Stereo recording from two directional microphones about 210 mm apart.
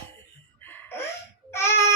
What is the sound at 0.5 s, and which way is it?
Laughter, 10° left (ahead or behind).